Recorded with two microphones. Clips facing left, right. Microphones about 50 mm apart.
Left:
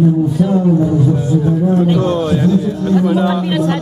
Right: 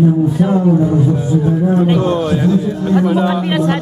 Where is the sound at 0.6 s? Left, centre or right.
Centre.